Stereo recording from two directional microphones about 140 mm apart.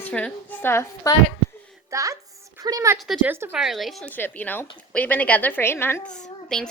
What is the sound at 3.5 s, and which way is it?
Speech, centre (ahead or behind).